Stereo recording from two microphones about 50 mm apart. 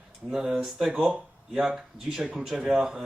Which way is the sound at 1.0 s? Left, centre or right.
Centre.